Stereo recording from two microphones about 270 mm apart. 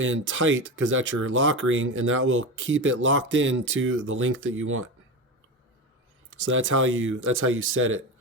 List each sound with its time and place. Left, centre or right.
0.0 s speech: right
6.3 s speech: right